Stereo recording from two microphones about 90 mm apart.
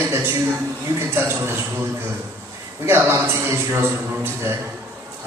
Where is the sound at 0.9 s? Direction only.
25° right (ahead or behind).